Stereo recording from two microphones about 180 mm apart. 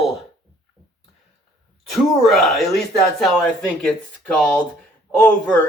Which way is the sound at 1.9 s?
Centre (ahead or behind).